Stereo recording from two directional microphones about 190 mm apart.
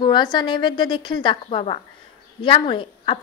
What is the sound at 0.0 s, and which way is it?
A woman's voice, 25° left (ahead or behind).